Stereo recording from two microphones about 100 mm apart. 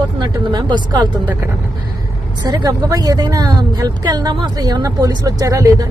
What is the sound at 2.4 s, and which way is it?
Speech, 45° right (ahead or behind).